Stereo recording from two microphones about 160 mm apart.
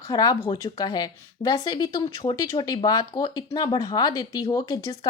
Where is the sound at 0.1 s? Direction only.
25° left (ahead or behind).